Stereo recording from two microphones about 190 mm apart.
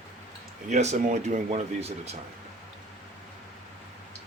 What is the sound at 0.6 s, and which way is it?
Speech, 35° right (ahead or behind).